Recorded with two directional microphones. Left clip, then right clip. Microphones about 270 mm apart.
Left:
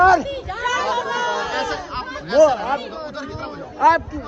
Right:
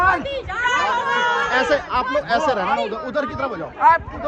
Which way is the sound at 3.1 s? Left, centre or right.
Right.